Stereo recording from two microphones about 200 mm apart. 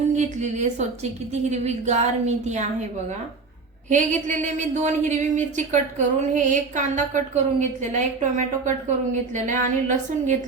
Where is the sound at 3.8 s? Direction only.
40° right (ahead or behind).